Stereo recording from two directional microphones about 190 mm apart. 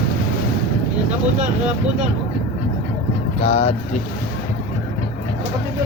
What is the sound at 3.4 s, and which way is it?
Speech, 35° left (ahead or behind).